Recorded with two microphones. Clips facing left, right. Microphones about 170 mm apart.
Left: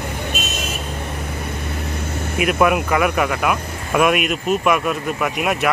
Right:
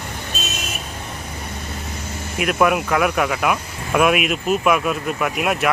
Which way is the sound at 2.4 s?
Centre (ahead or behind).